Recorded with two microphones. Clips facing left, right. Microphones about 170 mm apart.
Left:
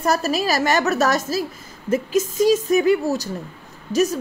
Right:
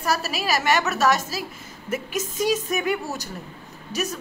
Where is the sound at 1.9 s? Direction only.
30° left (ahead or behind).